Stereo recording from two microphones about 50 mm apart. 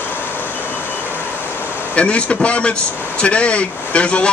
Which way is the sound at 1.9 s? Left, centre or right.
Left.